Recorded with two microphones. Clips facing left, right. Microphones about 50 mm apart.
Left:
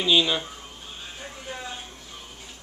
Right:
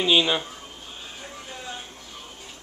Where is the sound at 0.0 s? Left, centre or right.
Centre.